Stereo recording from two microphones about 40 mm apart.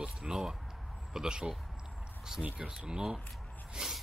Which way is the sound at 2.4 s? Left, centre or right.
Right.